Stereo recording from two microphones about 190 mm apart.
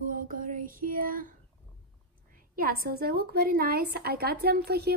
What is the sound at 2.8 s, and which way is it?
A woman's voice, 55° right (ahead or behind).